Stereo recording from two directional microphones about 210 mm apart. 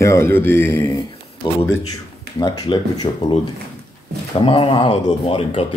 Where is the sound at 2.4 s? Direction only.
20° left (ahead or behind).